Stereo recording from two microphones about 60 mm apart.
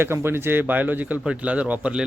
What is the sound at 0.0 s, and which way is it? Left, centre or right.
A man's voice, right.